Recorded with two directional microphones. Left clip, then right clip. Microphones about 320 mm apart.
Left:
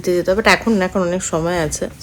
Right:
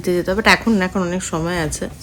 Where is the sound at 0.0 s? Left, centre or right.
Centre.